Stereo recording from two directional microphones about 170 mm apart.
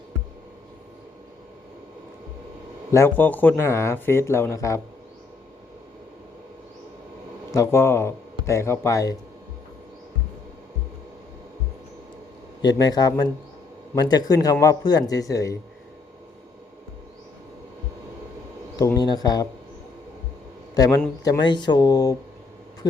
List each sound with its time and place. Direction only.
2.9 s speech: 15° left (ahead or behind)
7.5 s speech: 15° left (ahead or behind)
12.6 s a man's voice: 25° left (ahead or behind)
18.8 s a man's voice: 20° left (ahead or behind)
21.2 s a man's voice: 25° left (ahead or behind)